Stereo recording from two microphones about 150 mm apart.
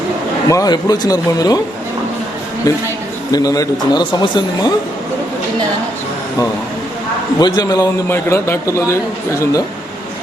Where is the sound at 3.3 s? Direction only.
25° left (ahead or behind).